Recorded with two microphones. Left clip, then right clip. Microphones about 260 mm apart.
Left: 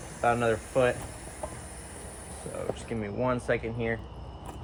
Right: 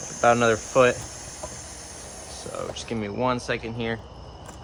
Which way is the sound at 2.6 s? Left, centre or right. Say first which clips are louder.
Right 3 dB; centre.